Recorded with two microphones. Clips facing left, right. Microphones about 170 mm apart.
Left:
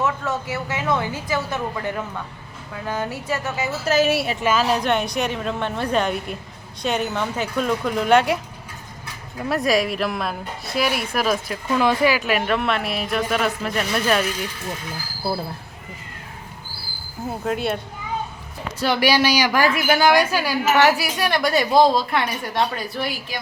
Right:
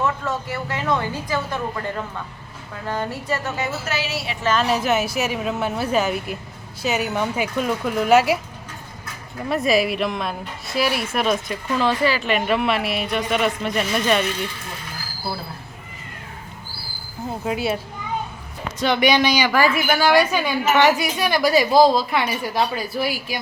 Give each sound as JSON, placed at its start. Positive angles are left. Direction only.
{"t": 0.0, "sound": "a woman's voice", "side_deg": 5}
{"t": 3.8, "sound": "a woman's voice", "side_deg": 45}
{"t": 4.4, "sound": "a woman's voice", "side_deg": 0}
{"t": 9.5, "sound": "a woman's voice", "side_deg": 0}
{"t": 17.4, "sound": "a woman's voice", "side_deg": -5}
{"t": 18.8, "sound": "a woman's voice", "side_deg": 5}